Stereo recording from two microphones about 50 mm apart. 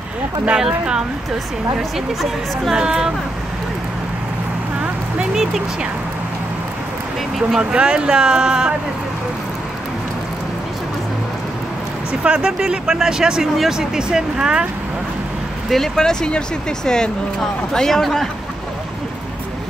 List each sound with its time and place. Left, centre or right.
0.6 s speech: centre
2.7 s speech: centre
5.3 s speech: centre
7.7 s speech: centre
12.2 s speech: right
15.7 s speech: centre